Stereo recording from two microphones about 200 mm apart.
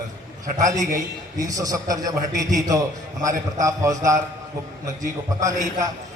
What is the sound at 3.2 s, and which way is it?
A man's voice, 15° right (ahead or behind).